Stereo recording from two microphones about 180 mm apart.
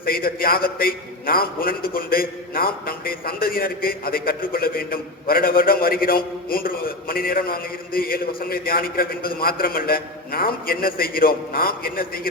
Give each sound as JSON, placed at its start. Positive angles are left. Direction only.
{"t": 0.0, "sound": "a man's voice", "side_deg": 55}